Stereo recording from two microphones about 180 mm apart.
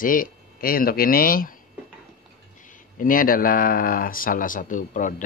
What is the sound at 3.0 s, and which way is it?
Speech, 50° left (ahead or behind).